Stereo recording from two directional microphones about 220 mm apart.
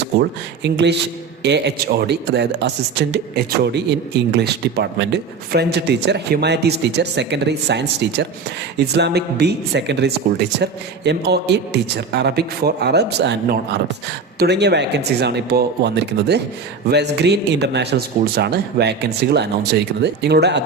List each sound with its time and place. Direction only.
0.2 s a man's voice: 50° right (ahead or behind)